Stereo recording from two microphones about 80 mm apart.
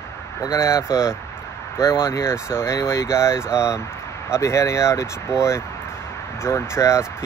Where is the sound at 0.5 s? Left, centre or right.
Left.